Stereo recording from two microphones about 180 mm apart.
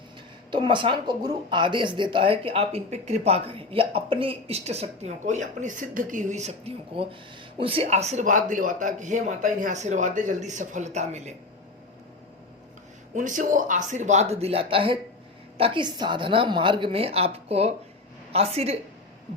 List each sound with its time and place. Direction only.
0.5 s speech: 25° right (ahead or behind)
13.1 s a woman's voice: 45° right (ahead or behind)